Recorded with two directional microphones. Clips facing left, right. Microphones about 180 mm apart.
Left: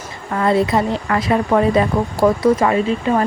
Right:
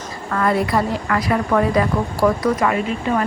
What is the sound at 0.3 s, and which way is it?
A woman's voice, 25° left (ahead or behind).